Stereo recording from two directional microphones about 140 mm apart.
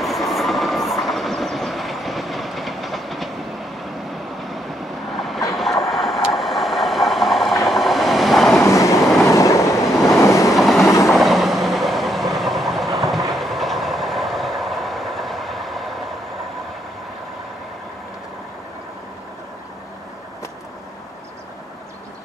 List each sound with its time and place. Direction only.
0.0 s train: centre (ahead or behind)
5.6 s vehicle: centre (ahead or behind)
7.6 s train: centre (ahead or behind)
8.5 s train: 20° left (ahead or behind)
10.5 s train: centre (ahead or behind)